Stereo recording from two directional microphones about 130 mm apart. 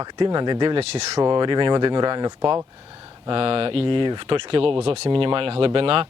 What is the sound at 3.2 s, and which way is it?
Speech, 45° right (ahead or behind).